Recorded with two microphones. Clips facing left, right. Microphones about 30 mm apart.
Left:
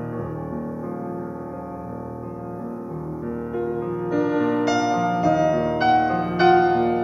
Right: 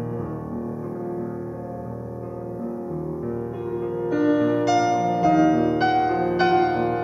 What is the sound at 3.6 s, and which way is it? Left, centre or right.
Music, centre.